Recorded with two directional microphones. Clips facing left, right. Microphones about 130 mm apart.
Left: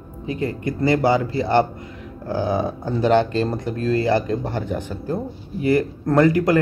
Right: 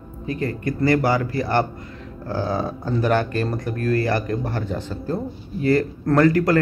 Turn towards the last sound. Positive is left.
turn(degrees=20)  # may be behind; listen again after turning